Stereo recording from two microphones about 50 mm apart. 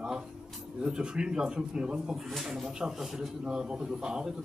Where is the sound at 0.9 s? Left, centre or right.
Centre.